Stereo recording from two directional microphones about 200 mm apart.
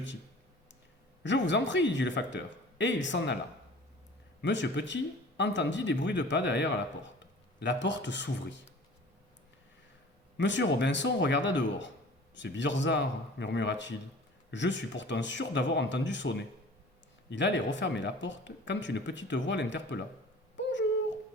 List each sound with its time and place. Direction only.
1.2 s speech: 65° left (ahead or behind)
4.4 s speech: 60° left (ahead or behind)
10.3 s speech: 65° left (ahead or behind)
20.6 s a sound: 65° left (ahead or behind)